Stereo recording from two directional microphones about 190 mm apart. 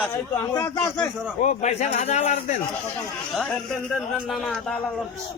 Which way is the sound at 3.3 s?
Centre (ahead or behind).